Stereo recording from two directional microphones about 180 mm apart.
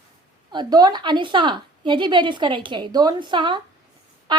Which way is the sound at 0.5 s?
25° right (ahead or behind).